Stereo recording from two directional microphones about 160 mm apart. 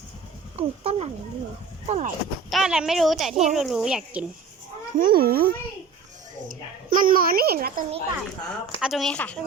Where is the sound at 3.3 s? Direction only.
45° right (ahead or behind).